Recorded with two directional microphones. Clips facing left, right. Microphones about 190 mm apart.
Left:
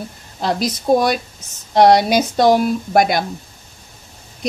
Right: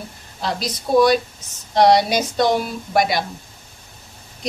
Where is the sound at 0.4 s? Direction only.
50° left (ahead or behind).